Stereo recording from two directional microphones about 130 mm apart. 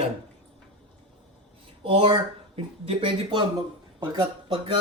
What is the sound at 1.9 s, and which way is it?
Speech, 45° right (ahead or behind).